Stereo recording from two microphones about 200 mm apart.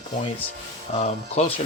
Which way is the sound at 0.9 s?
30° left (ahead or behind).